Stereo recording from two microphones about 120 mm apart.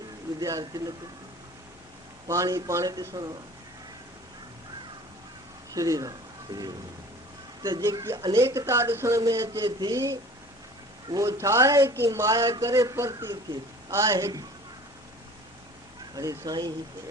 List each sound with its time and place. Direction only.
0.3 s speech: 30° right (ahead or behind)
2.2 s speech: 25° right (ahead or behind)
5.7 s speech: 30° right (ahead or behind)
9.6 s speech: 35° right (ahead or behind)
11.1 s speech: 25° right (ahead or behind)
16.1 s speech: 25° right (ahead or behind)